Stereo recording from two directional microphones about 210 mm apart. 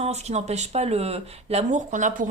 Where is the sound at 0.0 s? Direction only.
30° right (ahead or behind).